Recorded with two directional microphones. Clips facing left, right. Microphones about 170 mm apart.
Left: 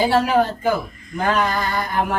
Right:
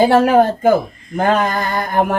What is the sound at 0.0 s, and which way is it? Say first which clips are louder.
Speech: right 6 dB; 50° right (ahead or behind).